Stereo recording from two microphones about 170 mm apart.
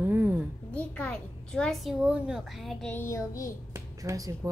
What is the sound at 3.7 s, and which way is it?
Speech, 20° right (ahead or behind).